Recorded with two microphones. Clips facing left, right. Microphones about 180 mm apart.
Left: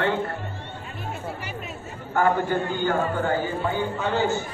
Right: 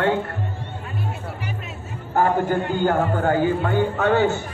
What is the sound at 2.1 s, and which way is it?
Speech, 40° right (ahead or behind).